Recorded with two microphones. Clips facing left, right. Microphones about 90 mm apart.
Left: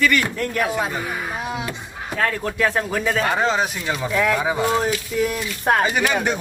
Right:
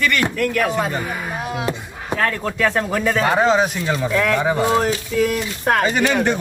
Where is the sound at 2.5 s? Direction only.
5° left (ahead or behind).